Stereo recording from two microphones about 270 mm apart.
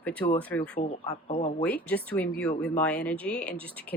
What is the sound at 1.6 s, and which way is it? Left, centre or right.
Speech, centre.